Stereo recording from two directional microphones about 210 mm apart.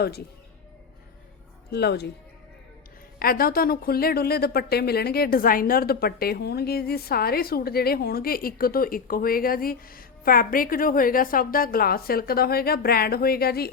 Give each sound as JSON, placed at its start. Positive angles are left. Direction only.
{"t": 1.7, "sound": "speech", "side_deg": 50}
{"t": 3.2, "sound": "speech", "side_deg": 45}